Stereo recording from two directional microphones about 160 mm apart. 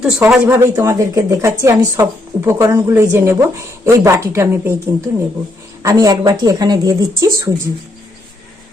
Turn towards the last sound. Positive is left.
turn(degrees=-20)  # may be behind; listen again after turning